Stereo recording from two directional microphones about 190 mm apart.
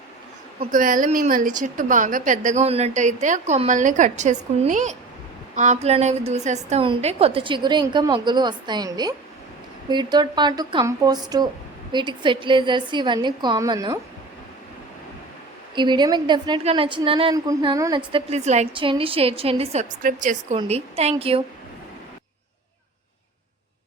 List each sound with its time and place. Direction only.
0.7 s a woman's voice: 45° right (ahead or behind); by 14.0 s 20° right (ahead or behind)
15.7 s a woman's voice: 25° right (ahead or behind)
18.1 s a woman's voice: 35° right (ahead or behind)